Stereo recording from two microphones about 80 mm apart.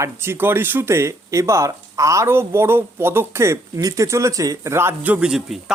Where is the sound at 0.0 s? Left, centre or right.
Right.